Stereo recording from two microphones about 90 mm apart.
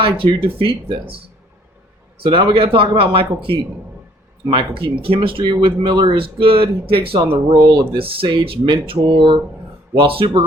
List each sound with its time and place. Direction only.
0.0 s speech: 85° right
2.2 s speech: 85° right
4.4 s speech: 65° right (ahead or behind)